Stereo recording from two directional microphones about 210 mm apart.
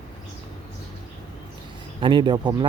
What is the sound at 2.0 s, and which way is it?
Speech, 20° right (ahead or behind).